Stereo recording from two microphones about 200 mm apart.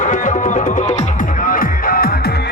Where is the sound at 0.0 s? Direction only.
40° left (ahead or behind).